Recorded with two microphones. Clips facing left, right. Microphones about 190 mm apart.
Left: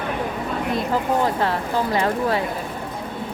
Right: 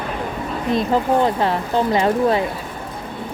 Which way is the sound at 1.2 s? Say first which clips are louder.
Right 3 dB; 20° right (ahead or behind).